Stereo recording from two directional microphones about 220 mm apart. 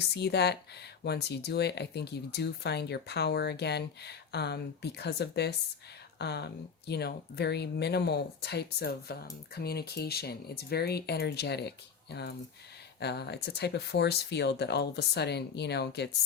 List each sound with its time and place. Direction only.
0.0 s speech: 50° left (ahead or behind)
13.0 s speech: 50° left (ahead or behind)